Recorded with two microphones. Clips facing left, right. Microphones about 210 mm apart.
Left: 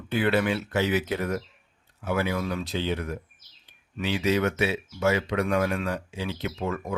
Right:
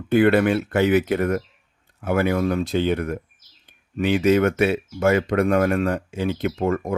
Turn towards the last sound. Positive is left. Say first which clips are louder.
# right 8 dB
turn(degrees=-50)  # may be behind; listen again after turning